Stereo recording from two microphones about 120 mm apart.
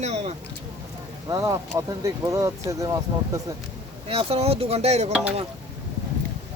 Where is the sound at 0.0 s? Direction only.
65° right (ahead or behind).